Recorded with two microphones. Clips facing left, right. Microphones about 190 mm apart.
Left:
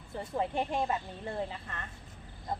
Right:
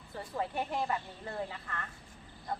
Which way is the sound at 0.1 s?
25° left (ahead or behind).